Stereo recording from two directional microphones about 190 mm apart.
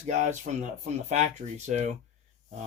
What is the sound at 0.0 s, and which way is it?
Speech, 40° right (ahead or behind).